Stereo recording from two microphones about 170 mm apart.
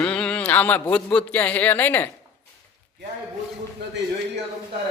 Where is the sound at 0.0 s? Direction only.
5° left (ahead or behind).